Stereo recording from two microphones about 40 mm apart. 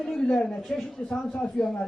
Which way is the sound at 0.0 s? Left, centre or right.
Centre.